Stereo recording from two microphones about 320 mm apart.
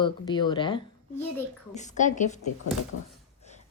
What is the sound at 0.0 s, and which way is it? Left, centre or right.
A woman's voice, centre.